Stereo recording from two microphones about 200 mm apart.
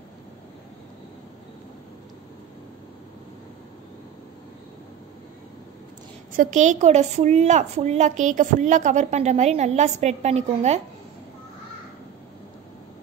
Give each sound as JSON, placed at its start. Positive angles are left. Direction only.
{"t": 6.3, "sound": "a woman's voice", "side_deg": -40}